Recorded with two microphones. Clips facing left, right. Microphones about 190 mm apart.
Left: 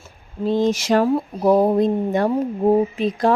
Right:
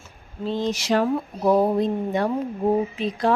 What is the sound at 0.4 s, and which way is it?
Speech, 50° left (ahead or behind).